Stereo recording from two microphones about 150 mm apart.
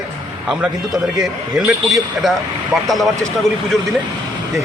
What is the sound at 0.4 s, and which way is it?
A man's voice, 5° right (ahead or behind).